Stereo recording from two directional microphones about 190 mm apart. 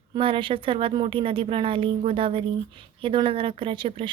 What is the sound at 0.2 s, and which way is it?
Speech, 25° right (ahead or behind).